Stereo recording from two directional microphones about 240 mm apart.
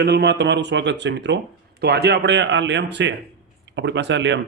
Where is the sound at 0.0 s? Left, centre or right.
Right.